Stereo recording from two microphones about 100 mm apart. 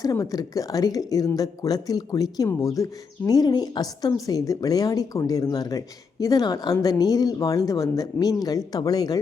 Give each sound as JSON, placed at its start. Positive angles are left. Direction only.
{"t": 0.0, "sound": "a woman's voice", "side_deg": 35}